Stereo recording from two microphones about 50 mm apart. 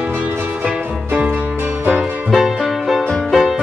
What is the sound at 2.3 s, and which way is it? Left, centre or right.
Music, centre.